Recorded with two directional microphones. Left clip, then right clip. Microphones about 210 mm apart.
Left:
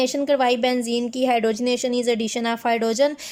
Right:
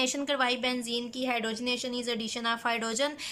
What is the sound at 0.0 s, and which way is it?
A woman's voice, 25° left (ahead or behind).